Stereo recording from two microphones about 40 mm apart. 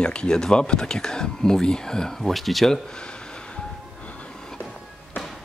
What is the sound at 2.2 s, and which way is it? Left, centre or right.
Speech, centre.